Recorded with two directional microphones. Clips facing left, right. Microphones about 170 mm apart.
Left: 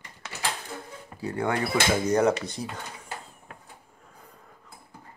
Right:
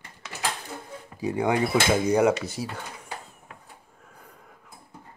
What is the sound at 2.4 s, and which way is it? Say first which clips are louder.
Speech: right 2 dB; 5° right (ahead or behind).